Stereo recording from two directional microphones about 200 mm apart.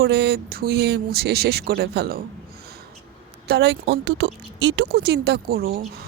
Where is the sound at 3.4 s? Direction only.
55° right (ahead or behind).